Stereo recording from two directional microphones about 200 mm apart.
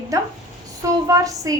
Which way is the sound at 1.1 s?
15° right (ahead or behind).